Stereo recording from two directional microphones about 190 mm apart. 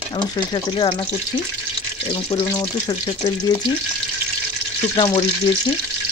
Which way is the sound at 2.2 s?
25° left (ahead or behind).